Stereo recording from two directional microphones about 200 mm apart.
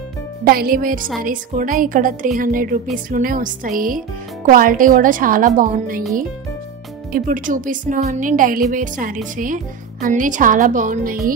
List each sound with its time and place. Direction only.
0.5 s a woman's voice: 45° right (ahead or behind)
7.1 s speech: 45° right (ahead or behind)